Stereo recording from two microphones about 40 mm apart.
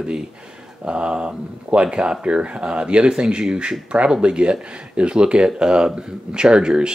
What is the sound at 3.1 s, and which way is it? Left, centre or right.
Speech, centre.